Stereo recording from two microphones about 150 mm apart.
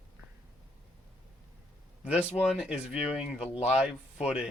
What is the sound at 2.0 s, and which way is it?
Speech, 5° right (ahead or behind).